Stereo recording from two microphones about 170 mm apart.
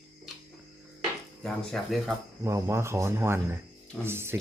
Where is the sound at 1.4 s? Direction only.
Centre (ahead or behind).